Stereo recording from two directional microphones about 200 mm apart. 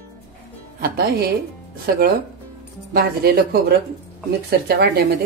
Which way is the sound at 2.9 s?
50° right (ahead or behind).